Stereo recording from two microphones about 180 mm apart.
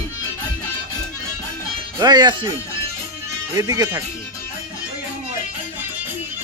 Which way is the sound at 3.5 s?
20° right (ahead or behind).